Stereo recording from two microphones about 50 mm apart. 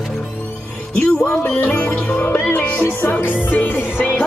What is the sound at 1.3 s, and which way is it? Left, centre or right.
Music, left.